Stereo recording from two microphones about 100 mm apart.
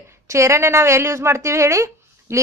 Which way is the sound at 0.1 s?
30° right (ahead or behind).